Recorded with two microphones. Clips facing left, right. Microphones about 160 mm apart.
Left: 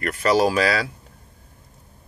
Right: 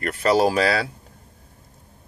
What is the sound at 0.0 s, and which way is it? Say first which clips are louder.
Speech: even; 30° right (ahead or behind).